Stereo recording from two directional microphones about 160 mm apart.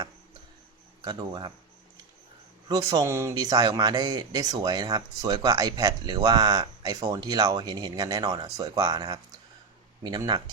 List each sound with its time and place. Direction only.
1.0 s speech: 25° right (ahead or behind)
2.6 s speech: 25° right (ahead or behind)